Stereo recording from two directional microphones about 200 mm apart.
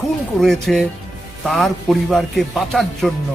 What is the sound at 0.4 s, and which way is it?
A man's voice, centre (ahead or behind).